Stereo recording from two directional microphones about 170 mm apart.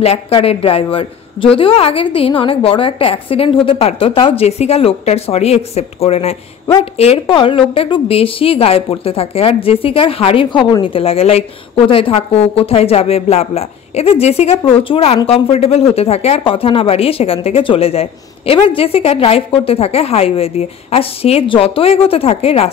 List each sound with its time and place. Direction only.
0.0 s a woman's voice: 35° left (ahead or behind)